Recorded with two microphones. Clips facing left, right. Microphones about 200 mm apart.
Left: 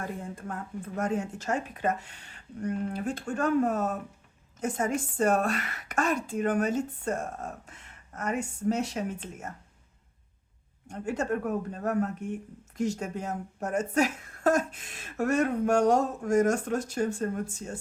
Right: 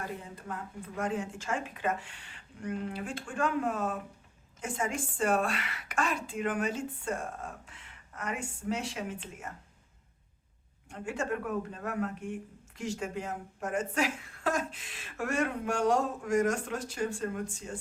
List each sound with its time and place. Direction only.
0.2 s speech: 50° left (ahead or behind)
10.8 s speech: 40° left (ahead or behind)